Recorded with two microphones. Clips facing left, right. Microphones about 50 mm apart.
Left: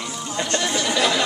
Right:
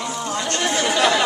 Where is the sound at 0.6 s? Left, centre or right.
Right.